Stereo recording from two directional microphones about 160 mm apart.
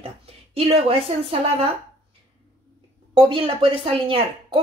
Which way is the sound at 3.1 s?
30° right (ahead or behind).